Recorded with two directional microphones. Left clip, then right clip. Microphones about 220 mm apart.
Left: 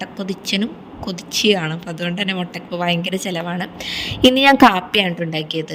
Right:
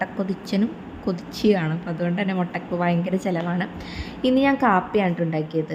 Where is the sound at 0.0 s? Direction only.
30° left (ahead or behind).